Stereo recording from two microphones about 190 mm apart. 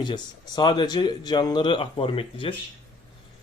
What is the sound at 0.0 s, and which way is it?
Speech, 25° left (ahead or behind).